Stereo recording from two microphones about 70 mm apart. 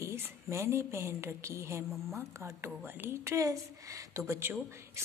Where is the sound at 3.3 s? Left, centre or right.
Right.